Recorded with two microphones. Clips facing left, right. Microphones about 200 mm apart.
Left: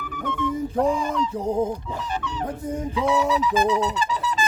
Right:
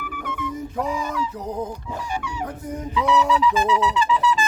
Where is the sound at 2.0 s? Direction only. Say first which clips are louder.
Even; 10° right (ahead or behind).